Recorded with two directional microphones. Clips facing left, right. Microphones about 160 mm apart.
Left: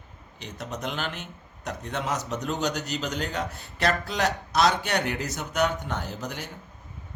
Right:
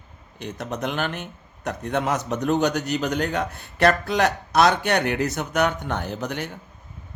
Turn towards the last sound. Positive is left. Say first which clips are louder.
# right 5 dB
turn(degrees=-65)  # may be behind; listen again after turning